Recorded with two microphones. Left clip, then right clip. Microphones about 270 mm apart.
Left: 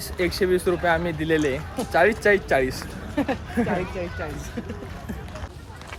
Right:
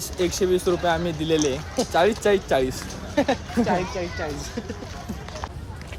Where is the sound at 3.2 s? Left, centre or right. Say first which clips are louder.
Right 4 dB; right.